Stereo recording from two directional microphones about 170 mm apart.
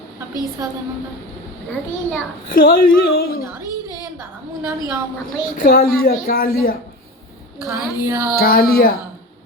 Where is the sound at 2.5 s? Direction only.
60° left (ahead or behind).